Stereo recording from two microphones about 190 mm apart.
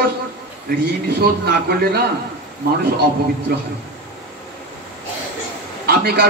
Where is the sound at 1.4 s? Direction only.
55° right (ahead or behind).